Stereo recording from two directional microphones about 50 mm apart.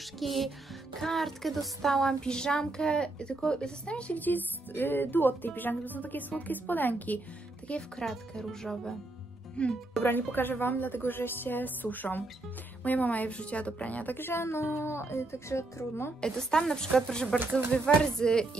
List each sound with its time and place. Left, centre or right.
0.2 s music: centre
0.9 s speech: centre; by 4.2 s left
4.2 s music: left
7.7 s speech: left
8.0 s speech: centre
9.6 s speech: left
10.0 s music: left
14.1 s speech: left
16.2 s speech: centre